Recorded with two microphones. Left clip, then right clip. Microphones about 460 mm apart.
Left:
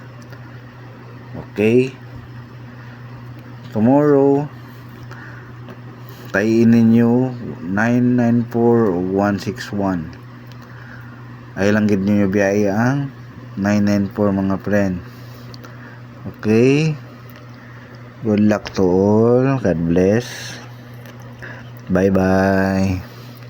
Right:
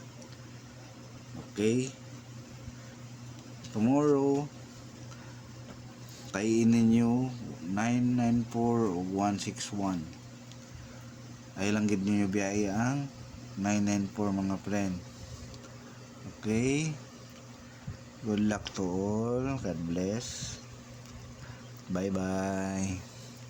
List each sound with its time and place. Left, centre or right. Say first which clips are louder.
1.5 s speech: left 15 dB; right
3.8 s speech: left 13 dB; right
6.3 s speech: left 13 dB; right
11.5 s speech: left 14 dB; right
16.4 s mantra: left 16 dB; right
18.3 s speech: left 15 dB; right
21.9 s mantra: left 18 dB; right